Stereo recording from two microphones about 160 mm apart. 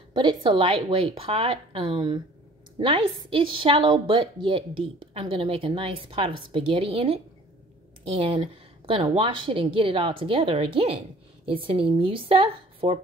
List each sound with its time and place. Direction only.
0.1 s a woman's voice: 30° right (ahead or behind)